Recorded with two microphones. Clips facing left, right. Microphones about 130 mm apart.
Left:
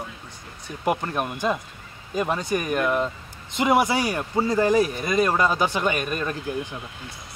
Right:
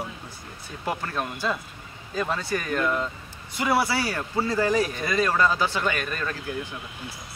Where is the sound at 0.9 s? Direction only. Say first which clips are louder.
Left 4 dB; 20° left (ahead or behind).